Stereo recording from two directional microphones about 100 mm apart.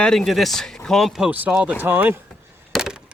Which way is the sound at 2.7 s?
5° right (ahead or behind).